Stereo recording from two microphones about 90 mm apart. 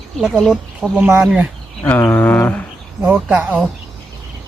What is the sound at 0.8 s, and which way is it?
Speech, 15° right (ahead or behind).